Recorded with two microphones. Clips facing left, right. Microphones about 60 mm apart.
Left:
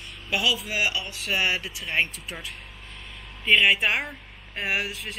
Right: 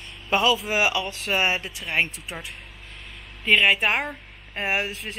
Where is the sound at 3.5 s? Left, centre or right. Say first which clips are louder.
Right 1 dB; right.